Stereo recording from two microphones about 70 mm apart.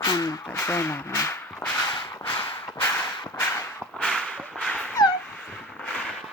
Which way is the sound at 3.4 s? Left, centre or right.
Left.